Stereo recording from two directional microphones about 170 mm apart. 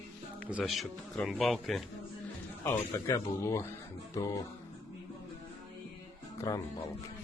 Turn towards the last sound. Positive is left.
turn(degrees=20)  # may be behind; listen again after turning